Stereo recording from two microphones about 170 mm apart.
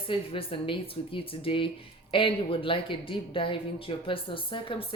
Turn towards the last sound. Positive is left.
turn(degrees=30)  # may be behind; listen again after turning